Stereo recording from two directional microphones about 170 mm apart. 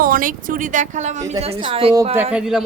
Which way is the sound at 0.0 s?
55° right (ahead or behind).